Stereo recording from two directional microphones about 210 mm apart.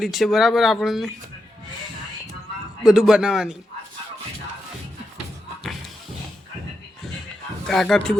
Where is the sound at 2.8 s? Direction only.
5° right (ahead or behind).